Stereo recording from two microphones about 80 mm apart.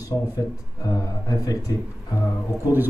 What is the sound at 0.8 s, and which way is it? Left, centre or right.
Speech, left.